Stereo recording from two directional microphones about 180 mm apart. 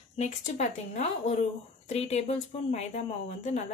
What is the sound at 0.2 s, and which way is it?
Speech, 40° left (ahead or behind).